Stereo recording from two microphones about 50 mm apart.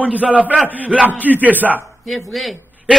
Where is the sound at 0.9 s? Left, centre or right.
Right.